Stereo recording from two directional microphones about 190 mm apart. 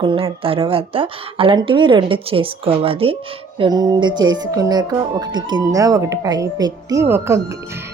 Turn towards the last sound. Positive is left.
turn(degrees=-15)  # may be behind; listen again after turning